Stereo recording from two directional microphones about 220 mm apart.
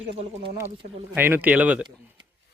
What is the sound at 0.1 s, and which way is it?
Speech, 25° right (ahead or behind).